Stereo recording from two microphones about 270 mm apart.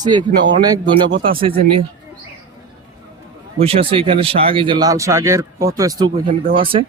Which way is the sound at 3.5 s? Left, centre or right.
Right.